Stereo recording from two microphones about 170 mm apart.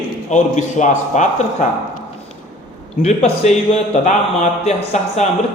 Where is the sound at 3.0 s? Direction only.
40° left (ahead or behind).